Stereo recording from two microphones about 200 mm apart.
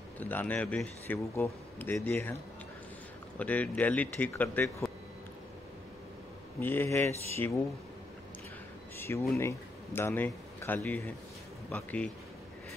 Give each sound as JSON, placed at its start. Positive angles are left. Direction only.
{"t": 0.2, "sound": "speech", "side_deg": 10}
{"t": 3.3, "sound": "speech", "side_deg": 5}
{"t": 6.6, "sound": "speech", "side_deg": 10}
{"t": 8.9, "sound": "speech", "side_deg": 10}